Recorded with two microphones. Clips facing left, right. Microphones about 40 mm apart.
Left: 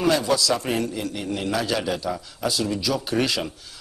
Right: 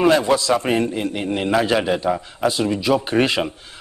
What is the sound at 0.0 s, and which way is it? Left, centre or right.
A man's voice, right.